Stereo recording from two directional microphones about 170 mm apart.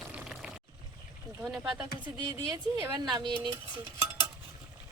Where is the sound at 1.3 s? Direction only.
20° right (ahead or behind).